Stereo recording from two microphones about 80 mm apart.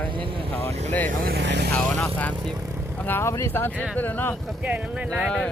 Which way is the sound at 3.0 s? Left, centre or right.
Left.